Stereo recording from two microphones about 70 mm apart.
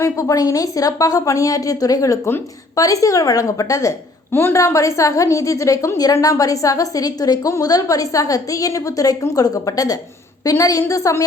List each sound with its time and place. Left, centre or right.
0.0 s a woman's voice: left
4.3 s a woman's voice: left
4.5 s a woman's voice: left